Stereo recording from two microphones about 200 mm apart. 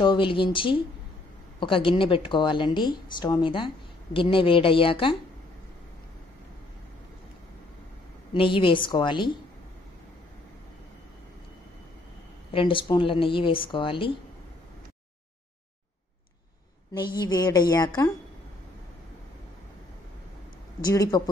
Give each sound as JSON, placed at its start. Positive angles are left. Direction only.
{"t": 0.0, "sound": "speech", "side_deg": 25}
{"t": 8.3, "sound": "speech", "side_deg": 25}
{"t": 12.4, "sound": "speech", "side_deg": 25}
{"t": 16.9, "sound": "speech", "side_deg": 20}
{"t": 20.8, "sound": "speech", "side_deg": 15}